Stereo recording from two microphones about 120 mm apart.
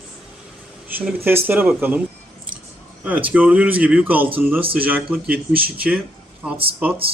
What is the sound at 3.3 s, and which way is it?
Speech, 15° right (ahead or behind).